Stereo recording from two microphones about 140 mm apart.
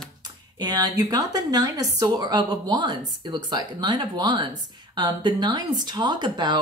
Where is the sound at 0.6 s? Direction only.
30° right (ahead or behind).